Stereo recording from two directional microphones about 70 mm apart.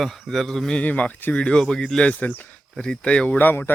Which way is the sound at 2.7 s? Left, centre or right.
Centre.